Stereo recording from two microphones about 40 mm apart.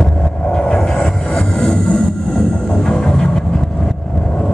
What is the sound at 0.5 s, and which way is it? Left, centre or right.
Music, centre.